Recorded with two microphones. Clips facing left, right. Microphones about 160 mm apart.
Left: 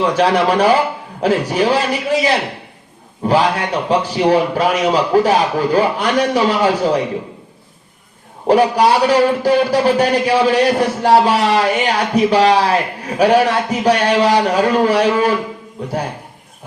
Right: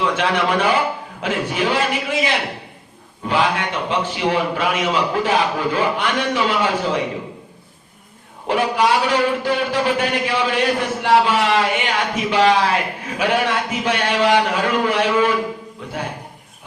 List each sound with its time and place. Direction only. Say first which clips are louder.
0.0 s a man's voice: left 5 dB; 35° left (ahead or behind)
8.4 s a man's voice: left 6 dB; 40° left (ahead or behind)